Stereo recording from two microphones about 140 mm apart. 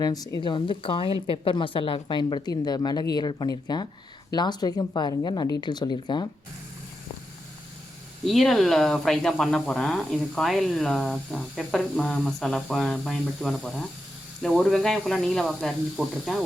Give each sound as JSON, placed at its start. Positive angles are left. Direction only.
{"t": 0.0, "sound": "a woman's voice", "side_deg": 25}
{"t": 8.2, "sound": "speech", "side_deg": 0}